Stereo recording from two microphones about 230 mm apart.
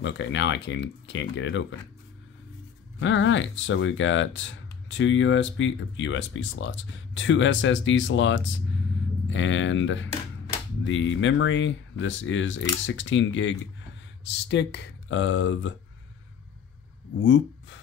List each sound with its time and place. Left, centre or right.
0.0 s speech: left
3.0 s speech: left
17.2 s speech: left